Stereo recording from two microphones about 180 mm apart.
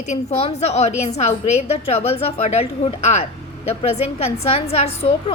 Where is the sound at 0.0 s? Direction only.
40° left (ahead or behind).